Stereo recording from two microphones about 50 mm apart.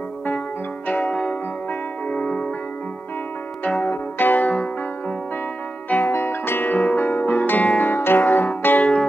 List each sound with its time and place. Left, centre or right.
0.8 s music: left
3.8 s music: left
5.9 s music: left
6.1 s music: left
6.7 s music: left
7.9 s music: left